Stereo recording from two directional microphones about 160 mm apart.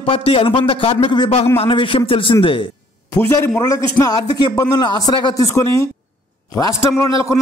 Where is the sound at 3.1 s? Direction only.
15° left (ahead or behind).